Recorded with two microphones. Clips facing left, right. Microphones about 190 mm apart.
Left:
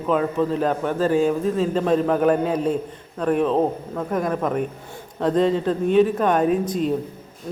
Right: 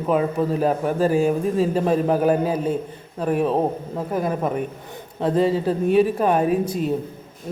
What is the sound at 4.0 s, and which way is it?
Speech, 30° right (ahead or behind).